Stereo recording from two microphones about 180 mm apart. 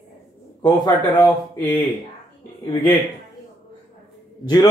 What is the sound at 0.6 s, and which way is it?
Speech, 25° left (ahead or behind).